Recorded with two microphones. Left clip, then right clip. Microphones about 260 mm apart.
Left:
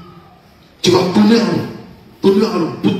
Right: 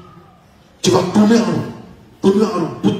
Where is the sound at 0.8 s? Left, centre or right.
Right.